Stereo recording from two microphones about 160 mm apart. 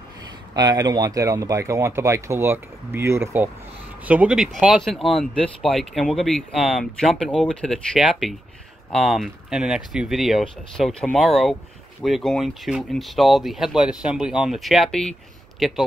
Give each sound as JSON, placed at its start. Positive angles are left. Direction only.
{"t": 0.6, "sound": "speech", "side_deg": -25}